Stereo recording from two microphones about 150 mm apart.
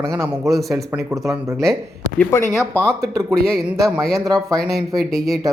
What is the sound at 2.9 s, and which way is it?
Speech, 20° right (ahead or behind).